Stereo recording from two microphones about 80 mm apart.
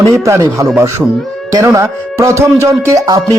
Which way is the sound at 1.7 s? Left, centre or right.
Right.